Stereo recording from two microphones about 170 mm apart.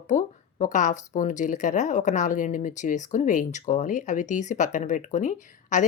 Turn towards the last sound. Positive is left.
turn(degrees=45)  # may be behind; listen again after turning